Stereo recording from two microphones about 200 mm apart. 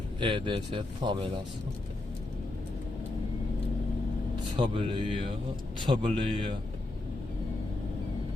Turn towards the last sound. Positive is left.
turn(degrees=-25)  # may be behind; listen again after turning